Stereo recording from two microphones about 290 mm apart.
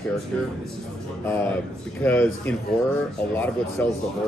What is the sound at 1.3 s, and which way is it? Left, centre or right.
A man's voice, centre.